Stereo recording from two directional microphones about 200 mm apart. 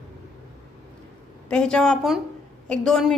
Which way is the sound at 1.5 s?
5° left (ahead or behind).